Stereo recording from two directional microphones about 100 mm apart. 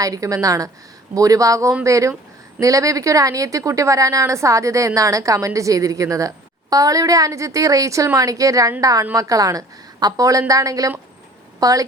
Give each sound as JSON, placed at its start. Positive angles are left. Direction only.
{"t": 0.0, "sound": "a woman's voice", "side_deg": -35}